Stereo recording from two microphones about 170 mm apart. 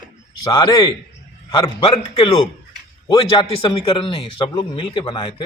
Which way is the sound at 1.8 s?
35° left (ahead or behind).